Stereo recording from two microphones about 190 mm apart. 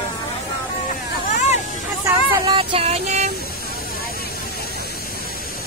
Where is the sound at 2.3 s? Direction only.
25° right (ahead or behind).